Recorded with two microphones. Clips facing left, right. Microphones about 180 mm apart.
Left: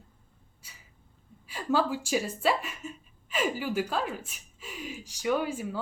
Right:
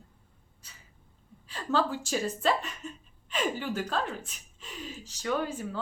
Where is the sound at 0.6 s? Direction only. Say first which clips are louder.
Left 1 dB; 10° left (ahead or behind).